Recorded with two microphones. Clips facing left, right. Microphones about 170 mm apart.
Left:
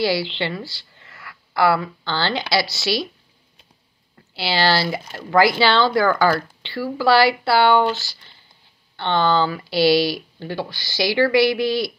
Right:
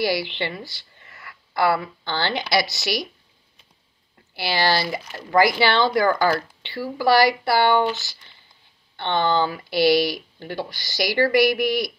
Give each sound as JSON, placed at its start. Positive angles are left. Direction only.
{"t": 0.0, "sound": "a woman's voice", "side_deg": -20}
{"t": 4.4, "sound": "speech", "side_deg": -20}